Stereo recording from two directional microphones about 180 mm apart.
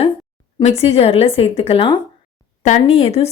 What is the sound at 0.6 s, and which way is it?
Speech, 35° left (ahead or behind).